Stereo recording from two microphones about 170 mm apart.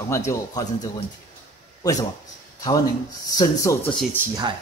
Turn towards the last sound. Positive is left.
turn(degrees=-20)  # may be behind; listen again after turning